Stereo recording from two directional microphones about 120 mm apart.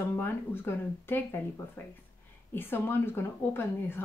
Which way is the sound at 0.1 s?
20° left (ahead or behind).